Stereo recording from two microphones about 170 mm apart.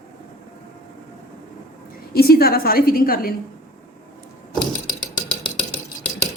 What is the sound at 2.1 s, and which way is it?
A woman's voice, 65° left (ahead or behind).